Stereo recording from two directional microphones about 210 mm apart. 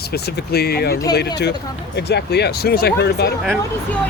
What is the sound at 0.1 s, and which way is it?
Speech, 50° left (ahead or behind).